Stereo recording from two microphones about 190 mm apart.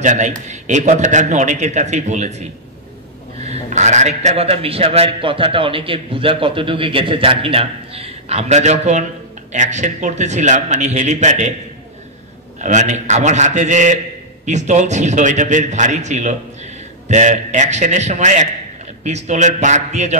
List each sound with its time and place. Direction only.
0.0 s a man's voice: 40° right (ahead or behind)
3.4 s a man's voice: 35° right (ahead or behind)
12.5 s a man's voice: 40° right (ahead or behind)